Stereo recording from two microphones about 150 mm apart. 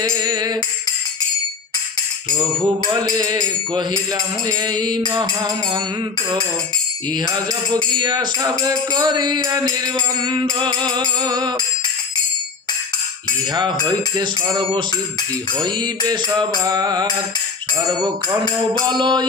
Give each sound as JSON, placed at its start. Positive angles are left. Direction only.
{"t": 0.1, "sound": "music", "side_deg": -25}
{"t": 2.4, "sound": "music", "side_deg": -30}
{"t": 4.4, "sound": "music", "side_deg": -30}
{"t": 7.3, "sound": "music", "side_deg": -30}
{"t": 13.5, "sound": "music", "side_deg": -30}